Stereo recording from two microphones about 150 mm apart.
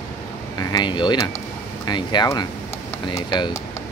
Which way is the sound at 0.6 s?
25° left (ahead or behind).